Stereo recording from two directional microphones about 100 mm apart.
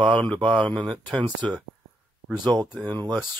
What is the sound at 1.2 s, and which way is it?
Speech, 50° right (ahead or behind).